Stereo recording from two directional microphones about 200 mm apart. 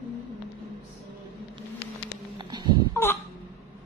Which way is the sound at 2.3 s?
20° right (ahead or behind).